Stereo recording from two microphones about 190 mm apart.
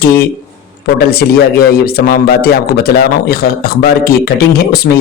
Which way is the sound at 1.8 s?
55° left (ahead or behind).